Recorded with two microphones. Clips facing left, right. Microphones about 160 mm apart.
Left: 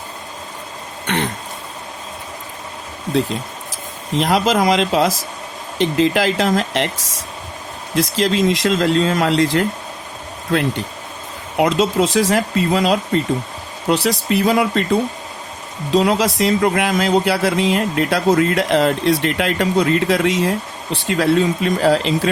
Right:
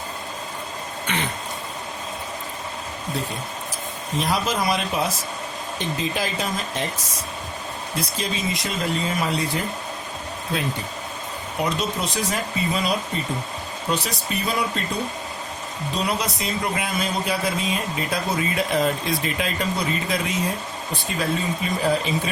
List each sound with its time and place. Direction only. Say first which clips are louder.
1.0 s throat clearing: left 7 dB; 65° left (ahead or behind)
4.2 s speech: left 8 dB; 90° left
7.9 s speech: left 12 dB; 90° left
10.5 s speech: left 8 dB; 75° left (ahead or behind)
11.5 s speech: left 10 dB; 90° left
15.9 s speech: left 10 dB; 90° left